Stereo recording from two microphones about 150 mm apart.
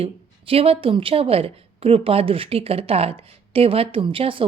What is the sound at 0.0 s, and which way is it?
A woman's voice, 40° right (ahead or behind).